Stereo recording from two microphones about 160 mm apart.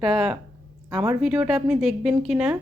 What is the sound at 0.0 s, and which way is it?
Speech, 5° right (ahead or behind).